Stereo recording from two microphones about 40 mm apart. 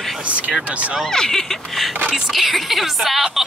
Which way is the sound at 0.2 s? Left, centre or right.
Right.